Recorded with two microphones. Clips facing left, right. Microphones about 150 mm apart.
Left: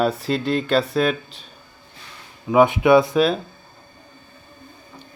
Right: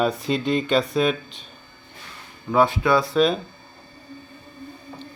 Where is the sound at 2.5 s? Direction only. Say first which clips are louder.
Left 5 dB; 15° left (ahead or behind).